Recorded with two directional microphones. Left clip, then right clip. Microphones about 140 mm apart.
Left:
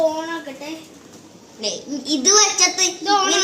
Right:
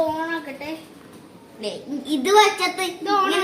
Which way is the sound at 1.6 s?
15° right (ahead or behind).